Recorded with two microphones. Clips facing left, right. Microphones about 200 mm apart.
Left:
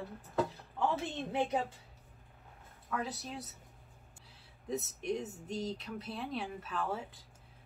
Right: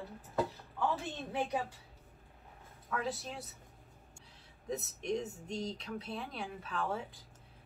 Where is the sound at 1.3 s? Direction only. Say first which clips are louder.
Left 2 dB; 20° left (ahead or behind).